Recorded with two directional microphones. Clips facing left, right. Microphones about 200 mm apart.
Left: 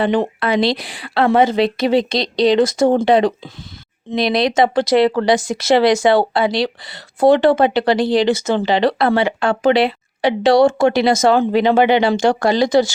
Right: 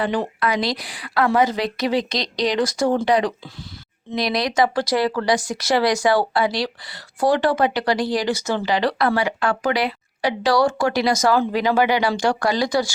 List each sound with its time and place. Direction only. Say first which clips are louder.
0.3 s speech: left 5 dB; 30° left (ahead or behind)